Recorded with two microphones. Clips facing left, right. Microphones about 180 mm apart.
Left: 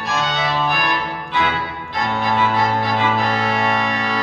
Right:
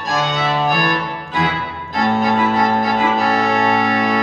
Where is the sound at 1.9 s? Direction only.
45° right (ahead or behind).